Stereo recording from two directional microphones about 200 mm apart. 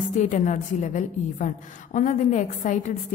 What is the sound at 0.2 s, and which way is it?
A woman's voice, 35° left (ahead or behind).